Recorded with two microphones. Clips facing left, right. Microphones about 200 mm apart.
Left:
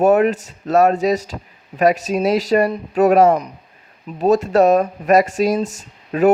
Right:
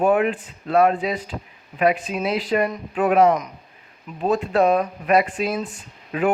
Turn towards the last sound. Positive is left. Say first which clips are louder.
# left 7 dB
turn(degrees=40)  # may be behind; listen again after turning